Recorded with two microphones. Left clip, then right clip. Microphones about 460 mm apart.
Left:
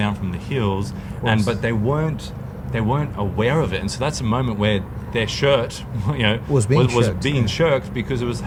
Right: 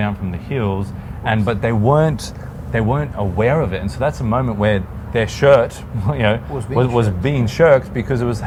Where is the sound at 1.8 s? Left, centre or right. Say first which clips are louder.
Right 11 dB; right.